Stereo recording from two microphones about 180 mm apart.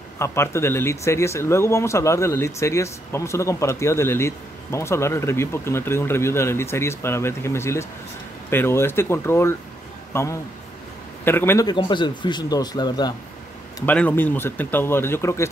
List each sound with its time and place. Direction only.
0.2 s a man's voice: 15° left (ahead or behind)
13.7 s speech: 10° left (ahead or behind)